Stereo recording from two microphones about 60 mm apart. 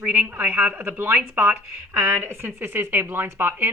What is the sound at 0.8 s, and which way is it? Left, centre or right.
Speech, right.